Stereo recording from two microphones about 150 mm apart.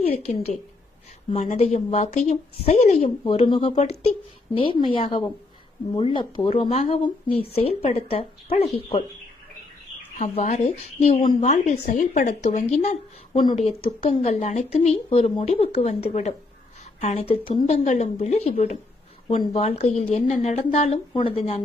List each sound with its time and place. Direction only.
0.0 s speech: 45° left (ahead or behind)
6.7 s speech: 45° left (ahead or behind)
10.2 s speech: 50° left (ahead or behind)
11.2 s speech: 30° left (ahead or behind)
11.4 s speech: 50° left (ahead or behind)
13.3 s speech: 30° left (ahead or behind)
14.0 s speech: 45° left (ahead or behind)
17.8 s speech: 50° left (ahead or behind)